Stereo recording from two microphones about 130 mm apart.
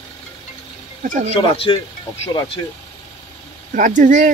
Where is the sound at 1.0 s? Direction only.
85° right.